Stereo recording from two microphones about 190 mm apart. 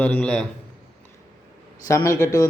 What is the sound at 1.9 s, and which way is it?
Speech, 15° left (ahead or behind).